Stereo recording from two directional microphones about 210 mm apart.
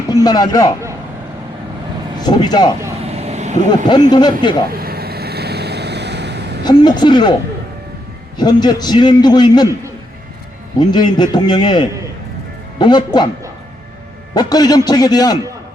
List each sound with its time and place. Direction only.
0.1 s speech: 20° left (ahead or behind)
2.2 s a man's voice: 20° left (ahead or behind)
3.1 s vehicle: 30° right (ahead or behind)
4.1 s a man's voice: 20° left (ahead or behind)
4.7 s vehicle: 45° right (ahead or behind)
6.7 s a man's voice: 20° left (ahead or behind)
8.4 s a man's voice: 20° left (ahead or behind)
10.8 s a man's voice: 20° left (ahead or behind)
14.3 s a man's voice: 20° left (ahead or behind)